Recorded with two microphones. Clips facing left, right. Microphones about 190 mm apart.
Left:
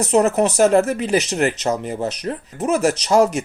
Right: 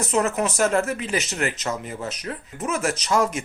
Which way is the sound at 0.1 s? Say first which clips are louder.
Left 7 dB; 40° left (ahead or behind).